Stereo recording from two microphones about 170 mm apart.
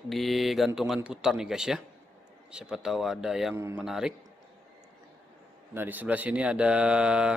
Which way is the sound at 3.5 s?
15° right (ahead or behind).